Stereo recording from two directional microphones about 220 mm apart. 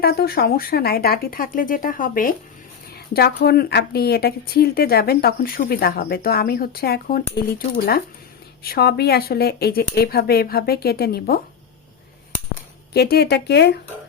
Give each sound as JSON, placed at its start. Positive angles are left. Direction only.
{"t": 0.0, "sound": "a woman's voice", "side_deg": 45}
{"t": 8.6, "sound": "a woman's voice", "side_deg": 45}
{"t": 12.9, "sound": "a woman's voice", "side_deg": 45}